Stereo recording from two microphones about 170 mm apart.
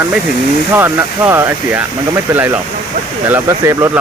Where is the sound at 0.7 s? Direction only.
15° right (ahead or behind).